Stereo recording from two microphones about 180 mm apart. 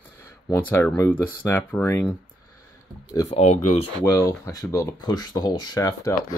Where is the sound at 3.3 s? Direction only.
35° left (ahead or behind).